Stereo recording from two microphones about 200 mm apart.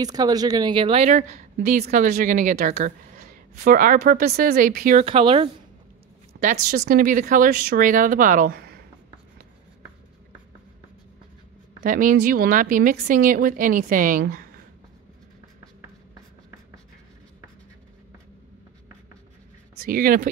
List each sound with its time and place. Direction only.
0.0 s speech: 20° right (ahead or behind); by 5.0 s 40° right (ahead or behind)
5.0 s speech: 25° right (ahead or behind)
6.4 s a woman's voice: 45° right (ahead or behind)
11.8 s a woman's voice: 45° right (ahead or behind)
19.8 s speech: 45° right (ahead or behind)